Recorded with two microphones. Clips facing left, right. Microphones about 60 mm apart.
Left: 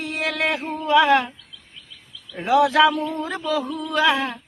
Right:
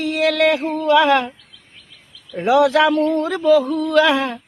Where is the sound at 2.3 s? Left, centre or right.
Right.